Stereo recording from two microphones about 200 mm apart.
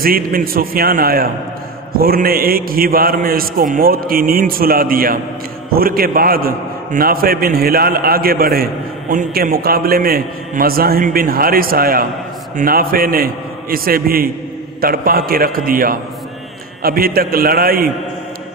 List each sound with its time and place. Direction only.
0.0 s a man's voice: 45° right (ahead or behind)